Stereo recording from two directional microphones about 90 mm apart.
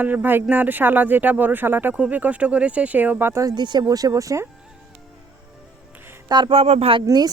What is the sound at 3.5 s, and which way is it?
Speech, 55° right (ahead or behind).